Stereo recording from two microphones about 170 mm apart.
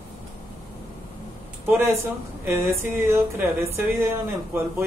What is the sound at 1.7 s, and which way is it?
Speech, 15° right (ahead or behind).